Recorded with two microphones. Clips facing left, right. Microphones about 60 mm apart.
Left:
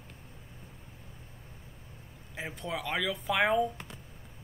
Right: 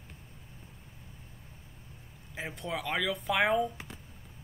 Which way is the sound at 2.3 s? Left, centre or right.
Centre.